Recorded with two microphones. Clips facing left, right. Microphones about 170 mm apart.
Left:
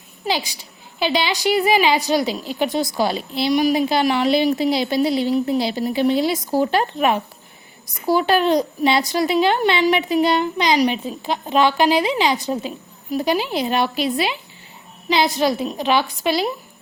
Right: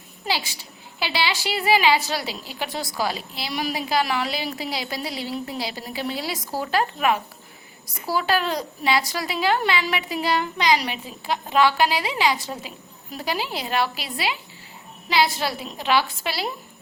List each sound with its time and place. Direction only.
0.3 s a child's voice: 15° left (ahead or behind)